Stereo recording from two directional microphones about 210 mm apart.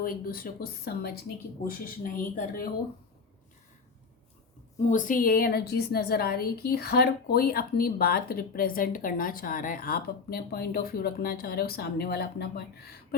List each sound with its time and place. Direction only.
0.0 s a woman's voice: 45° left (ahead or behind)
4.9 s a woman's voice: 40° left (ahead or behind)